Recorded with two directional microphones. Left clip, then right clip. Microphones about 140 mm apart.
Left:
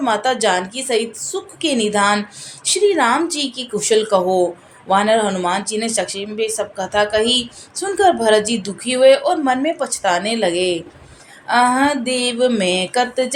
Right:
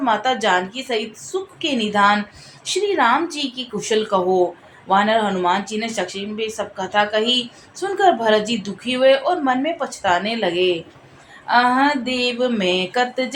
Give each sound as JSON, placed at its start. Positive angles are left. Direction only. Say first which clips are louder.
{"t": 0.0, "sound": "a woman's voice", "louder": "left 2 dB", "side_deg": 40}